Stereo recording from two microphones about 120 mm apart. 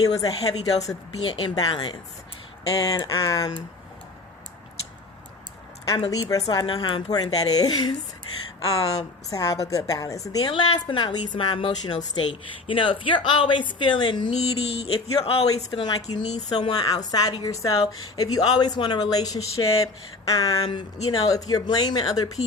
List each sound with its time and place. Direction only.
0.0 s speech: 30° left (ahead or behind)
6.1 s speech: 30° left (ahead or behind)
10.5 s a woman's voice: 40° left (ahead or behind)
14.3 s a woman's voice: 55° left (ahead or behind)
15.8 s speech: 35° left (ahead or behind)